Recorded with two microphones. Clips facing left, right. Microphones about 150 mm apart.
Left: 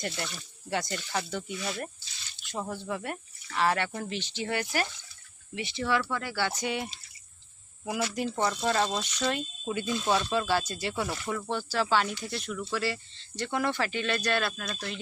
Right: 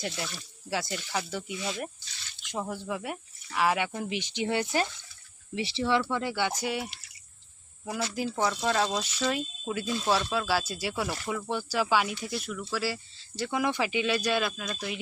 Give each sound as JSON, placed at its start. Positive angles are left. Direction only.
{"t": 0.0, "sound": "speech", "side_deg": 0}
{"t": 8.1, "sound": "speech", "side_deg": 0}